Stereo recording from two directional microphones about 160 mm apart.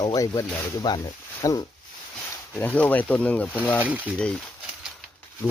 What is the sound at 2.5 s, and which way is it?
Speech, 10° left (ahead or behind).